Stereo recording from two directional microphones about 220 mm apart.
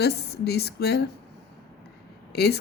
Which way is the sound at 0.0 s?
50° left (ahead or behind).